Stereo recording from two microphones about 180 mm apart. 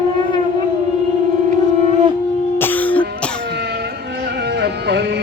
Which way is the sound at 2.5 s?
10° left (ahead or behind).